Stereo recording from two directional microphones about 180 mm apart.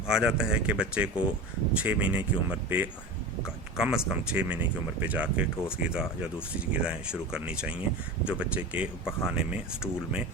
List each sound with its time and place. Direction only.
0.1 s speech: 5° right (ahead or behind)